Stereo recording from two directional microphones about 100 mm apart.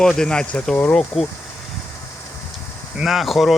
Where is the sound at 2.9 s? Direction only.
5° right (ahead or behind).